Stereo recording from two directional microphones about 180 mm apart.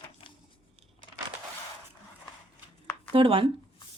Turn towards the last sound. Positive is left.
turn(degrees=-30)  # may be behind; listen again after turning